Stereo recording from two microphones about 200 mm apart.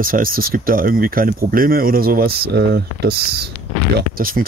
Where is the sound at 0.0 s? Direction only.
45° right (ahead or behind).